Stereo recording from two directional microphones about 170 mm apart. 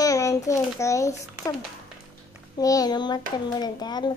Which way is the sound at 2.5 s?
20° left (ahead or behind).